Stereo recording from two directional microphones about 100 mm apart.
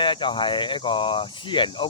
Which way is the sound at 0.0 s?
55° left (ahead or behind).